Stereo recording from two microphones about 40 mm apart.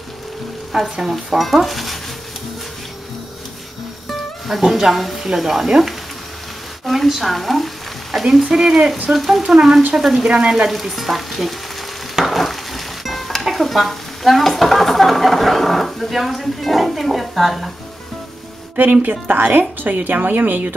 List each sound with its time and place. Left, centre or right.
0.7 s frying: centre
1.4 s speech: centre
4.1 s speech: centre
6.9 s frying: centre
8.5 s frying: centre
10.3 s frying: centre
10.7 s frying: centre
12.3 s stir: centre
18.8 s speech: right